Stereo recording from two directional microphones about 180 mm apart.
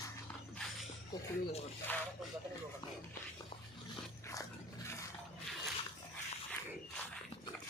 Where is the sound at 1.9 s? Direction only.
10° left (ahead or behind).